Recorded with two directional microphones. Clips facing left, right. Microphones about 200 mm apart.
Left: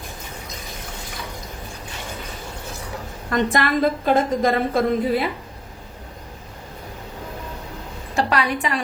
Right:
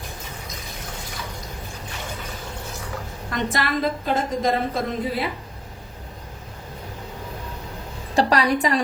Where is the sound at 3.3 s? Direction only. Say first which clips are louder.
Left 5 dB; 50° left (ahead or behind).